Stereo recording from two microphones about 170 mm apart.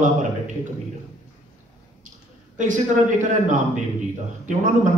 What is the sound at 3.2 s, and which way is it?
Speech, 45° right (ahead or behind).